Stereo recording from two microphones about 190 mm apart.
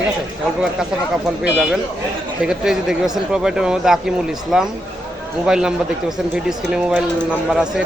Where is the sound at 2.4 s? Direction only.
5° right (ahead or behind).